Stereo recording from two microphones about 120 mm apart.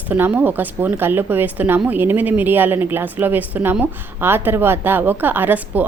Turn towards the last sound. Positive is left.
turn(degrees=-15)  # may be behind; listen again after turning